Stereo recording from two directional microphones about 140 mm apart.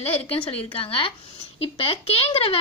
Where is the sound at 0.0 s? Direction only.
45° left (ahead or behind).